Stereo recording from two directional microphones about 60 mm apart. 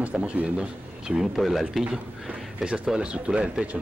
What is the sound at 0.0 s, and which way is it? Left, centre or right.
Speech, centre.